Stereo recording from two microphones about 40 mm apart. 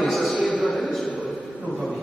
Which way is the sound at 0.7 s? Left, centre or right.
Centre.